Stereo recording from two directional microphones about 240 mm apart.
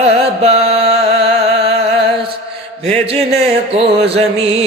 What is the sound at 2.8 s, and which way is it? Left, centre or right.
Music, right.